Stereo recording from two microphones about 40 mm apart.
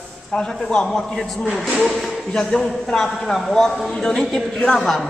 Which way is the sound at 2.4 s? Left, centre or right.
Centre.